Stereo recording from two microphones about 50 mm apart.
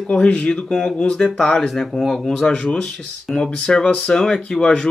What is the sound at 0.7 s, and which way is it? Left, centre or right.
Speech, centre.